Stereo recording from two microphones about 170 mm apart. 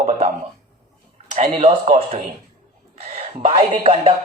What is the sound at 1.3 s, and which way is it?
Speech, 45° right (ahead or behind).